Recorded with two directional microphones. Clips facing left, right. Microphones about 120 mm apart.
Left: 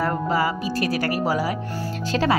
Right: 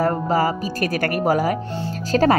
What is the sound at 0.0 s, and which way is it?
Speech, 40° right (ahead or behind).